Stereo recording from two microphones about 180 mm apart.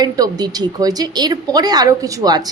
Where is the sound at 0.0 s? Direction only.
20° right (ahead or behind).